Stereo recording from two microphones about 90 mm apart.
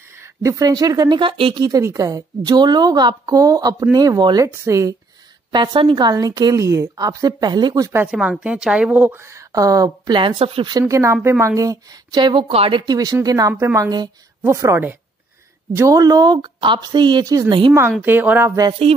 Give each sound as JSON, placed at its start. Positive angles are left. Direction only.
{"t": 0.1, "sound": "a woman's voice", "side_deg": -30}
{"t": 1.7, "sound": "a woman's voice", "side_deg": -40}
{"t": 5.5, "sound": "a woman's voice", "side_deg": -60}
{"t": 8.1, "sound": "a woman's voice", "side_deg": -10}
{"t": 9.2, "sound": "speech", "side_deg": -35}
{"t": 10.1, "sound": "speech", "side_deg": -80}
{"t": 10.7, "sound": "a woman's voice", "side_deg": -40}
{"t": 12.8, "sound": "a woman's voice", "side_deg": -45}
{"t": 14.4, "sound": "a woman's voice", "side_deg": -30}
{"t": 18.0, "sound": "speech", "side_deg": -20}